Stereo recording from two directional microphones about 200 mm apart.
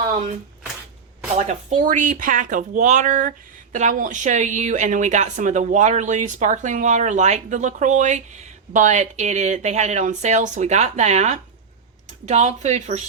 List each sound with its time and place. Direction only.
1.4 s speech: 35° right (ahead or behind)